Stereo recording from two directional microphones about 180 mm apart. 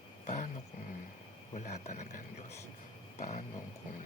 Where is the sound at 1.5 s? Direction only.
45° left (ahead or behind).